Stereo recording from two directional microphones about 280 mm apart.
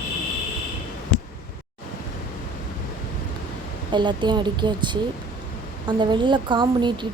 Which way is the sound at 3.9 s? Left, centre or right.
Centre.